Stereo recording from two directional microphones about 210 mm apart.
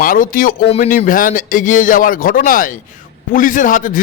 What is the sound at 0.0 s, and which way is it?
A man's voice, 40° left (ahead or behind).